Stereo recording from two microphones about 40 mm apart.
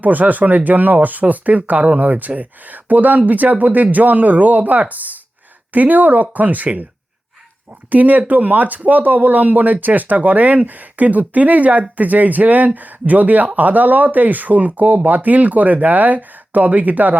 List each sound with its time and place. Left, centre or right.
0.0 s speech: right
7.9 s speech: right